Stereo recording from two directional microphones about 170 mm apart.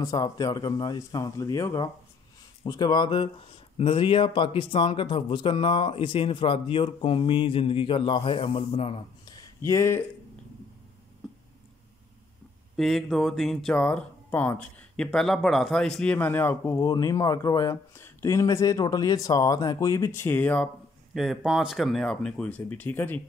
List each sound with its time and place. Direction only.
0.0 s speech: 20° left (ahead or behind)
9.2 s a sound: 20° left (ahead or behind)
12.7 s speech: centre (ahead or behind)